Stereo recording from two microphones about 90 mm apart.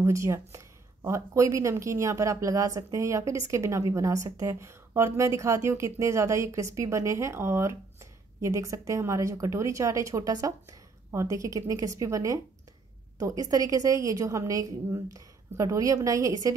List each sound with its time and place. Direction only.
0.0 s speech: 35° right (ahead or behind)